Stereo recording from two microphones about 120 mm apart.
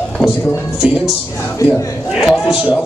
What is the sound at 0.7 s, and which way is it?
Speech, 5° right (ahead or behind).